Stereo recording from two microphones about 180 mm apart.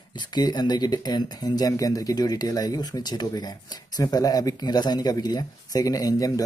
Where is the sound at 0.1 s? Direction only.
25° left (ahead or behind).